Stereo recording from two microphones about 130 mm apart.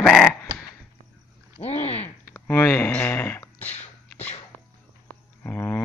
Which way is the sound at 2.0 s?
15° left (ahead or behind).